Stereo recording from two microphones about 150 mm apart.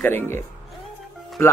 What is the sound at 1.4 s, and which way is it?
Speech, 15° left (ahead or behind).